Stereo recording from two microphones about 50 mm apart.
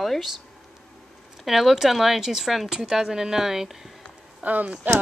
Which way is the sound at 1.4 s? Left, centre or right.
Centre.